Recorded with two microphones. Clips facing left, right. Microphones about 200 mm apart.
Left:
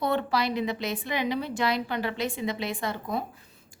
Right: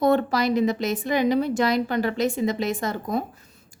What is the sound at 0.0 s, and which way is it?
A woman's voice, 45° right (ahead or behind).